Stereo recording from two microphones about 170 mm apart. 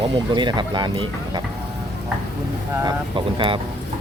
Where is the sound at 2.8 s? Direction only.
30° right (ahead or behind).